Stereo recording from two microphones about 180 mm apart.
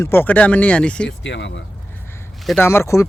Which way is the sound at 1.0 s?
85° left.